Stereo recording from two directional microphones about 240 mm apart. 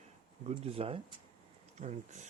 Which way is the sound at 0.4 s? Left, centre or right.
Right.